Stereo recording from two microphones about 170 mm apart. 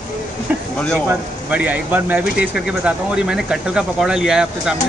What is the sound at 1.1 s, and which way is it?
Speech, 10° right (ahead or behind).